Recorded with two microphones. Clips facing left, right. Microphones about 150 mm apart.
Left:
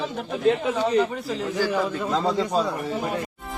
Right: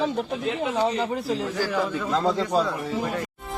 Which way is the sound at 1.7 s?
10° left (ahead or behind).